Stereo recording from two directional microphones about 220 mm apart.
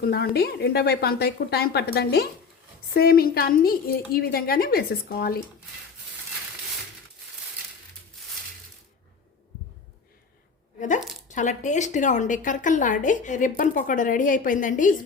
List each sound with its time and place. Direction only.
0.0 s speech: 45° left (ahead or behind)
10.8 s a sound: 35° left (ahead or behind)
11.3 s a woman's voice: 35° left (ahead or behind)